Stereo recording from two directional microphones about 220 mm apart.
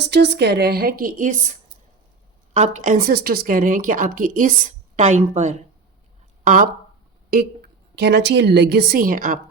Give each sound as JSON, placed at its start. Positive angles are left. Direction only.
{"t": 0.0, "sound": "a woman's voice", "side_deg": -50}
{"t": 7.9, "sound": "a woman's voice", "side_deg": -50}